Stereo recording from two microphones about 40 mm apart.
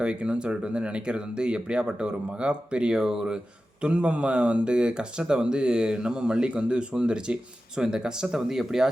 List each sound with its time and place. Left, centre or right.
0.0 s speech: right
2.9 s speech: centre